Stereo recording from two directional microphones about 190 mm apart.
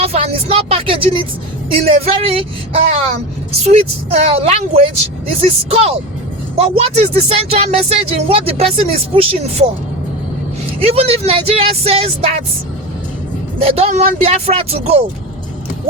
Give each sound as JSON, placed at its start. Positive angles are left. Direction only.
{"t": 0.0, "sound": "speech", "side_deg": -30}
{"t": 3.6, "sound": "speech", "side_deg": -30}
{"t": 10.8, "sound": "speech", "side_deg": -30}
{"t": 13.6, "sound": "speech", "side_deg": -30}